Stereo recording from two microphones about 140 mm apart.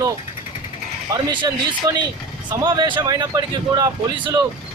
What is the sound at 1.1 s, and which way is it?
A man's voice, 30° right (ahead or behind).